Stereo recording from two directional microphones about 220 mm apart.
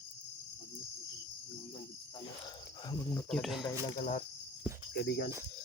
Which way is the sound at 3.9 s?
35° left (ahead or behind).